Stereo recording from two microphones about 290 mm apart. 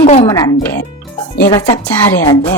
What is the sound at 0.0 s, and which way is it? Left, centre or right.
Music, left.